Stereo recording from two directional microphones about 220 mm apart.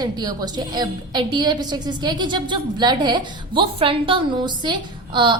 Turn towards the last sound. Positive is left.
turn(degrees=-20)  # may be behind; listen again after turning